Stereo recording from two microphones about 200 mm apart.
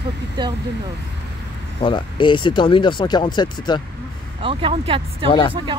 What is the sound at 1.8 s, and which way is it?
Speech, 25° left (ahead or behind).